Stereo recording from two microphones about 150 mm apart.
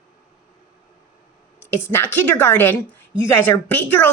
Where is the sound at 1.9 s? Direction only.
15° left (ahead or behind).